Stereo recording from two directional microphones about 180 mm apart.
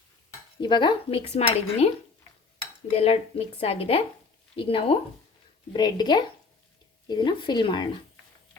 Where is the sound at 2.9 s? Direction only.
35° left (ahead or behind).